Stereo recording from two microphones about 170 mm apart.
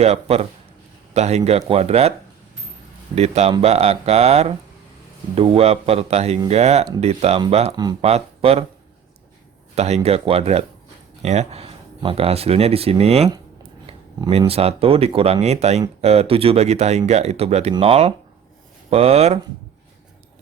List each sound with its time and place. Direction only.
0.0 s speech: 35° right (ahead or behind)
3.2 s speech: 40° right (ahead or behind)
7.7 s speech: 25° right (ahead or behind)
8.0 s speech: 35° right (ahead or behind)
9.7 s speech: 40° right (ahead or behind)